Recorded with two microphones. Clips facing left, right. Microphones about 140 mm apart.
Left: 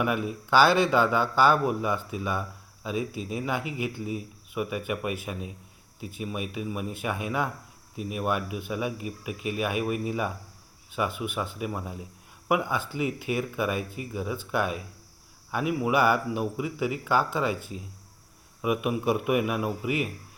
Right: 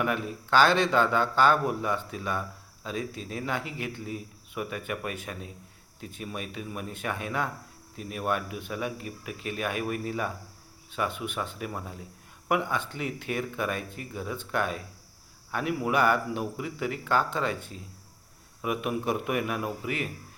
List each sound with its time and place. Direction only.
0.0 s speech: 10° left (ahead or behind)